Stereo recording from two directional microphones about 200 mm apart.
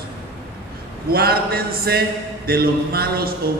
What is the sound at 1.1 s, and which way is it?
Speech, 50° right (ahead or behind).